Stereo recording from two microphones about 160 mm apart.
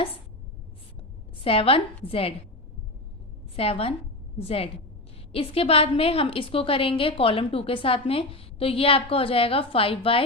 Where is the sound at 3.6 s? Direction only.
35° left (ahead or behind).